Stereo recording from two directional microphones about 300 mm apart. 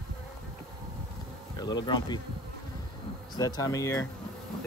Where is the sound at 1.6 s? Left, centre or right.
Centre.